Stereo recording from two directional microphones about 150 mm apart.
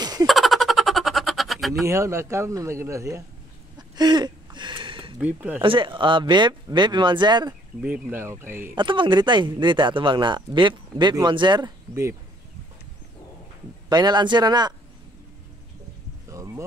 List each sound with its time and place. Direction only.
0.0 s giggle: 25° right (ahead or behind)
0.3 s a sound: centre (ahead or behind)
1.9 s a man's voice: 20° right (ahead or behind)
3.7 s a sound: 30° right (ahead or behind)
5.2 s speech: 10° right (ahead or behind)
5.6 s speech: 35° right (ahead or behind)
7.8 s speech: 10° right (ahead or behind)
8.7 s speech: 35° right (ahead or behind)
11.9 s a man's voice: 20° right (ahead or behind)
13.8 s a man's voice: 30° right (ahead or behind)
16.3 s a sound: 20° right (ahead or behind)